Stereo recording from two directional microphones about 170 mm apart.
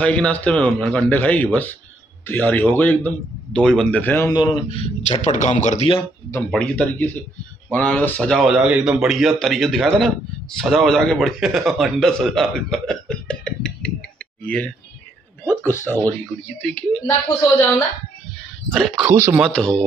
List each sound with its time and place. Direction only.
0.0 s a man's voice: 5° left (ahead or behind)
4.4 s speech: 30° left (ahead or behind)
6.5 s a man's voice: 10° left (ahead or behind)
18.7 s speech: centre (ahead or behind)
19.5 s speech: 5° left (ahead or behind)